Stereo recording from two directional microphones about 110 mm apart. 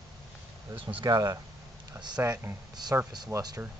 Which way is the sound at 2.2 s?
25° right (ahead or behind).